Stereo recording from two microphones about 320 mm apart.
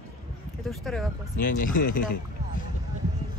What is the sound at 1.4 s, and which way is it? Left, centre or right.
Speech, left.